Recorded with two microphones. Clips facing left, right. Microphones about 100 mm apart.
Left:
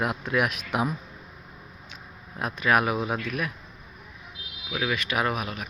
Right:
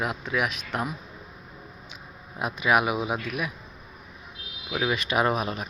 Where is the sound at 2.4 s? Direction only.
10° right (ahead or behind).